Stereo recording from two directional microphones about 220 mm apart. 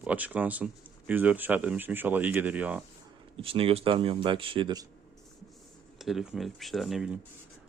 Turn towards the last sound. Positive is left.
turn(degrees=0)  # may be behind; listen again after turning